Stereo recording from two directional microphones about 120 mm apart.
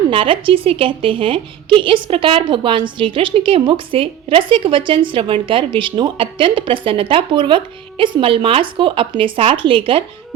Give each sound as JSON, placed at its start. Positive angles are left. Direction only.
{"t": 0.1, "sound": "a woman's voice", "side_deg": -50}